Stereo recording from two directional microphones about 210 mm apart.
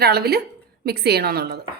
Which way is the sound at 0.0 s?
50° right (ahead or behind).